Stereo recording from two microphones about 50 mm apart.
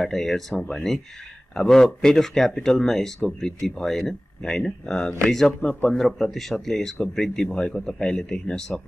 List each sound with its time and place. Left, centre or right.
0.0 s speech: centre
7.2 s speech: centre